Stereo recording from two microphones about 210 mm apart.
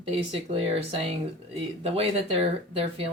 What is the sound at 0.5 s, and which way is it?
A woman's voice, 30° right (ahead or behind).